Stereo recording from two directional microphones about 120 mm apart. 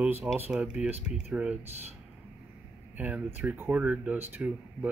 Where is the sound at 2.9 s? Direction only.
15° right (ahead or behind).